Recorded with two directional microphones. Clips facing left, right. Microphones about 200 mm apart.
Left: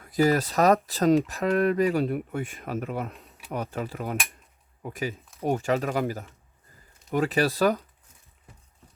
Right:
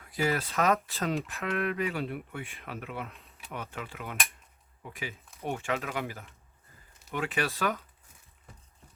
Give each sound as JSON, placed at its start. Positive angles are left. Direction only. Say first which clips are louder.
{"t": 0.1, "sound": "speech", "louder": "left 8 dB", "side_deg": 40}